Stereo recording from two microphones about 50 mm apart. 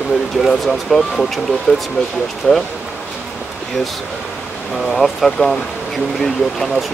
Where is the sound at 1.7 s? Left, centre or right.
Left.